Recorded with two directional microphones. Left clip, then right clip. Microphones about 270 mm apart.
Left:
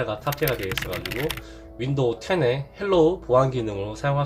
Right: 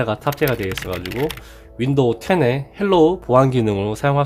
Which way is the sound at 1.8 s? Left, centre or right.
Right.